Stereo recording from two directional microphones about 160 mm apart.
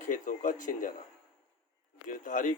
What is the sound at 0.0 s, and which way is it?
Speech, 50° left (ahead or behind).